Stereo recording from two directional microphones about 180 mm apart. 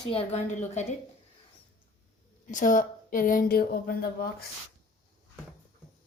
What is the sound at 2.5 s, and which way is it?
Speech, 45° left (ahead or behind).